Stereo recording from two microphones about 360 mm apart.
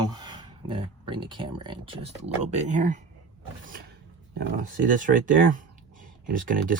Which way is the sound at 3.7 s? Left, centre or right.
Right.